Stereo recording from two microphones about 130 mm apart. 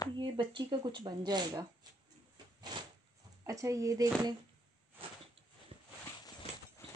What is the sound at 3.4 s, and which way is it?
Speech, 25° right (ahead or behind).